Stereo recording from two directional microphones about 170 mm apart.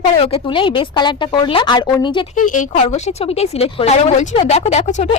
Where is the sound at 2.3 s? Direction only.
50° left (ahead or behind).